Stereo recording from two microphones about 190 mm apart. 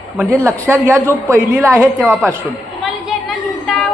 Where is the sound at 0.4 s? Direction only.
15° right (ahead or behind).